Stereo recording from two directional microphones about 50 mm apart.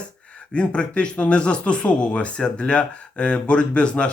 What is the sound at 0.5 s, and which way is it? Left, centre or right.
Speech, left.